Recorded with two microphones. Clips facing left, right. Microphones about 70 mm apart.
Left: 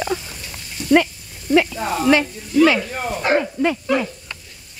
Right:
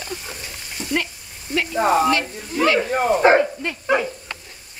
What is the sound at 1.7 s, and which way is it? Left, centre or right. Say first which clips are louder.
Speech: even; right.